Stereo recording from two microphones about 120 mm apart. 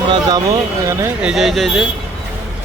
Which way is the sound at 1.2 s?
5° right (ahead or behind).